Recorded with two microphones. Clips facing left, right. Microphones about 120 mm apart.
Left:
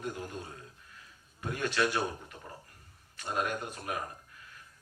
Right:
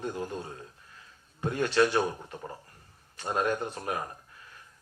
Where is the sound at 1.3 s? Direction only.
30° right (ahead or behind).